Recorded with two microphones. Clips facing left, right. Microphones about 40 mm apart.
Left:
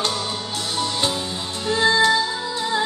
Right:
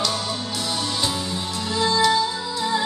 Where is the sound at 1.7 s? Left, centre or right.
Left.